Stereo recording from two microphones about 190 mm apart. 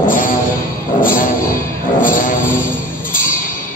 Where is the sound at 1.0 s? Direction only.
45° left (ahead or behind).